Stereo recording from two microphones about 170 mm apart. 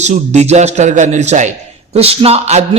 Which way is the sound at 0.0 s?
40° right (ahead or behind).